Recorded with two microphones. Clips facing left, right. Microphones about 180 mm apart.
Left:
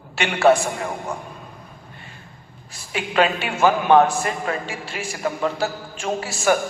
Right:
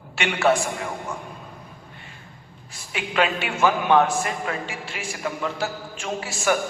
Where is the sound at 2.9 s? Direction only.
40° left (ahead or behind).